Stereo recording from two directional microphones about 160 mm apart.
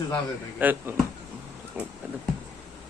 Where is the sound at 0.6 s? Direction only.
10° right (ahead or behind).